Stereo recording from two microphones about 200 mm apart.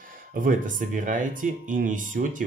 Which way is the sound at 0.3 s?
40° right (ahead or behind).